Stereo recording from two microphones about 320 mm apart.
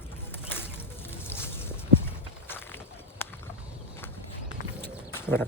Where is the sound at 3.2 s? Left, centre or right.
Centre.